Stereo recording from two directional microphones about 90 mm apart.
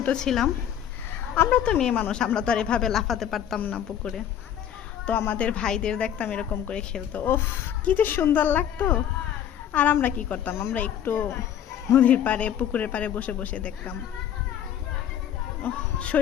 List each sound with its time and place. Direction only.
0.0 s a woman's voice: 10° left (ahead or behind)
3.6 s a woman's voice: 20° left (ahead or behind)
5.3 s a woman's voice: 15° left (ahead or behind)
15.6 s a woman's voice: 15° left (ahead or behind)